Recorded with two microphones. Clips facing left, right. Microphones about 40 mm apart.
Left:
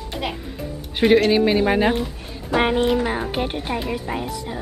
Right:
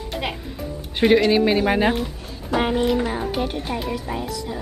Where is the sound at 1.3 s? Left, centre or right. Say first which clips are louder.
Left 1 dB; centre.